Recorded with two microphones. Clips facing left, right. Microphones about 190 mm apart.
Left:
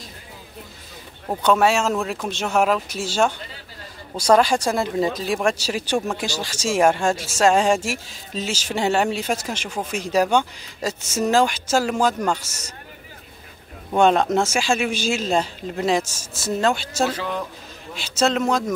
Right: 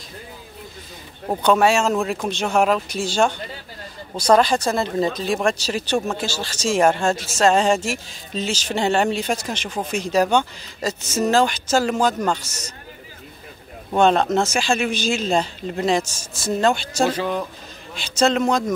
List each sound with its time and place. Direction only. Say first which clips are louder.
1.4 s speech: right 1 dB; centre (ahead or behind)
13.9 s speech: even; 10° left (ahead or behind)
17.1 s speech: right 3 dB; 15° right (ahead or behind)
17.9 s speech: right 2 dB; 5° left (ahead or behind)